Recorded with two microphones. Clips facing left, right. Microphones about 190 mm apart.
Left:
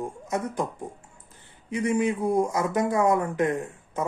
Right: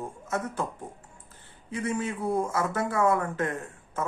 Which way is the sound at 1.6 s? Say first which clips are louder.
Left 6 dB; 15° left (ahead or behind).